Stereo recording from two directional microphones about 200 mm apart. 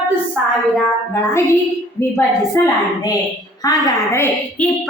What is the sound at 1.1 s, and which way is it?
Music, 10° left (ahead or behind).